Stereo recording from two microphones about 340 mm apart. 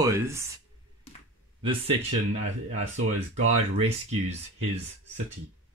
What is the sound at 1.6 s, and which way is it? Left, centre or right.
Speech, centre.